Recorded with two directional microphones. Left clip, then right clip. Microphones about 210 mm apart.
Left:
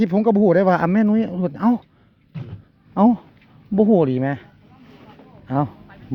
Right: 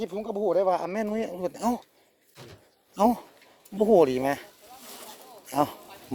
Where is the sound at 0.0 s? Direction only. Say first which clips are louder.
Left 11 dB; 40° left (ahead or behind).